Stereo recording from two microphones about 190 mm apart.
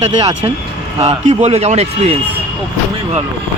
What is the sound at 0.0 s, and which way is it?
Speech, 25° right (ahead or behind).